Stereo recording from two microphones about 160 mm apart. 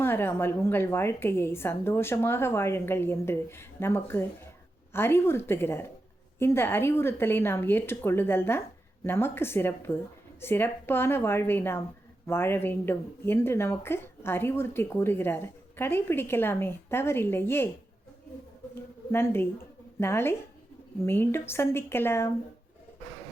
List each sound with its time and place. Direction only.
0.0 s speech: 15° left (ahead or behind)
18.7 s speech: 15° left (ahead or behind)